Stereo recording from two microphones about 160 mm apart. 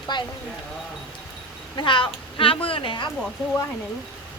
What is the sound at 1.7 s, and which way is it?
Speech, 30° left (ahead or behind).